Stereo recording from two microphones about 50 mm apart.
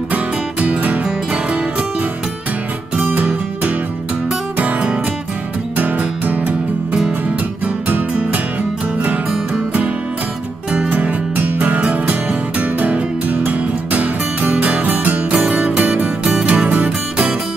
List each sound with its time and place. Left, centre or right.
0.1 s music: right
3.0 s music: right
4.6 s music: right
10.9 s music: right